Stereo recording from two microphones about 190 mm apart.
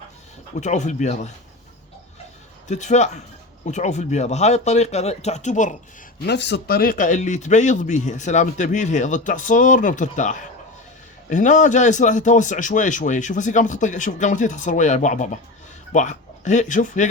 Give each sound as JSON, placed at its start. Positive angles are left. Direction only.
{"t": 0.6, "sound": "speech", "side_deg": 40}
{"t": 2.6, "sound": "speech", "side_deg": 40}
{"t": 6.2, "sound": "speech", "side_deg": 65}